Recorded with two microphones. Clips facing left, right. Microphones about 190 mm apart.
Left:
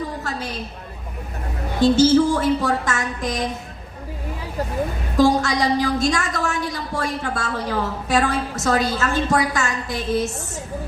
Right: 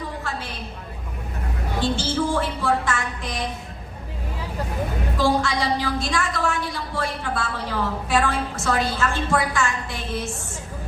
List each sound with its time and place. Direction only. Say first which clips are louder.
0.2 s a sound: left 3 dB; 40° left (ahead or behind)
1.8 s a woman's voice: left 10 dB; 40° left (ahead or behind)
5.1 s a woman's voice: left 5 dB; 45° left (ahead or behind)